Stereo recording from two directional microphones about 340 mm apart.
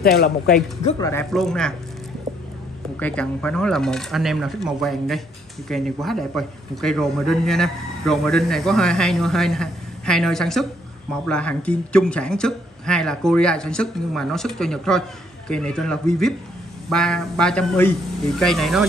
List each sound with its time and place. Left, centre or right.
0.0 s speech: left
0.8 s speech: centre
3.0 s speech: centre